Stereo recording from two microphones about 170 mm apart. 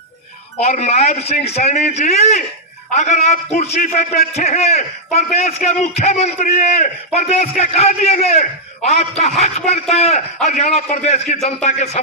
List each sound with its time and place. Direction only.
0.6 s a man's voice: 40° left (ahead or behind)